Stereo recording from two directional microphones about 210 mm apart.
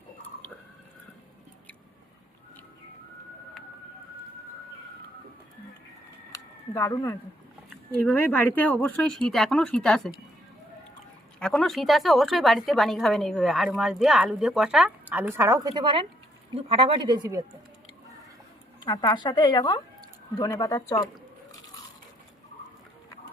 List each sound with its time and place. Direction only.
6.3 s a sound: 15° left (ahead or behind)
8.0 s a woman's voice: 10° left (ahead or behind)
11.3 s a woman's voice: 5° left (ahead or behind); by 17.4 s 20° right (ahead or behind)
18.8 s speech: 20° left (ahead or behind)